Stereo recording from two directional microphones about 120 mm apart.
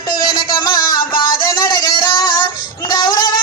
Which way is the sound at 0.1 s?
40° left (ahead or behind).